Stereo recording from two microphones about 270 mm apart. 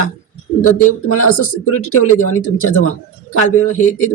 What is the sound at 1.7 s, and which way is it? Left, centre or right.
Speech, left.